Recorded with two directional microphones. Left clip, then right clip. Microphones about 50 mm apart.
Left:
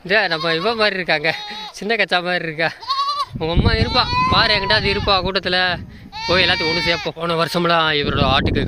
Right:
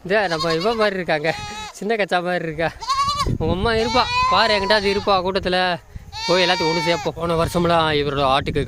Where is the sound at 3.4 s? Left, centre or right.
Right.